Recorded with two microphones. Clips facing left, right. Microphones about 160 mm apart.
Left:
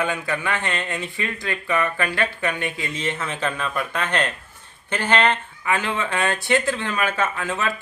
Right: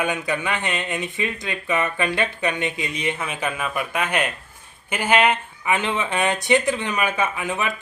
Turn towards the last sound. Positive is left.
turn(degrees=-15)  # may be behind; listen again after turning